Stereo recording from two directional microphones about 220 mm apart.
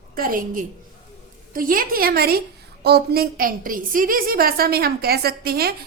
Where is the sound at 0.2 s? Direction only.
40° right (ahead or behind).